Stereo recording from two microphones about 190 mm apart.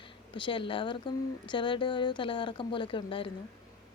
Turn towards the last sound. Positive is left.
turn(degrees=25)  # may be behind; listen again after turning